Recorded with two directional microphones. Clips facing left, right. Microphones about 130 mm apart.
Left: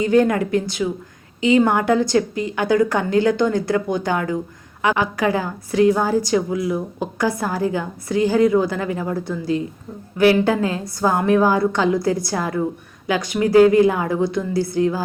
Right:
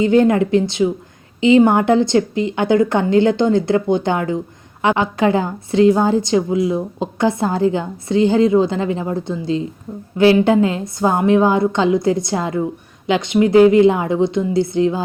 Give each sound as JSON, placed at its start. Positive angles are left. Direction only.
{"t": 0.0, "sound": "a woman's voice", "side_deg": -25}